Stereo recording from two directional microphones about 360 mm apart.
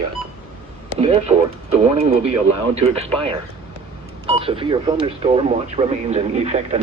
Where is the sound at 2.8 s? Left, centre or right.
Centre.